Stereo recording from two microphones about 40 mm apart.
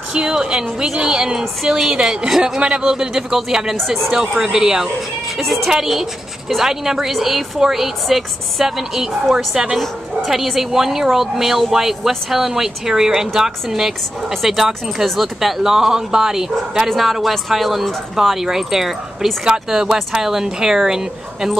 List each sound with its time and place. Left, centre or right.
0.1 s a woman's voice: right
2.0 s a woman's voice: centre
2.6 s a woman's voice: centre
4.1 s a woman's voice: centre
5.4 s speech: centre
5.7 s a woman's voice: centre
9.8 s a woman's voice: centre
16.9 s a woman's voice: centre
19.4 s a woman's voice: centre